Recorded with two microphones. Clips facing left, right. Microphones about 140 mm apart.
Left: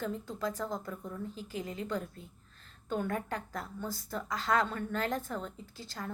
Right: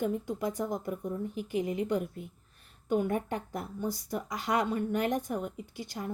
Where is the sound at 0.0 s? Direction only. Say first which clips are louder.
Right 5 dB; 20° right (ahead or behind).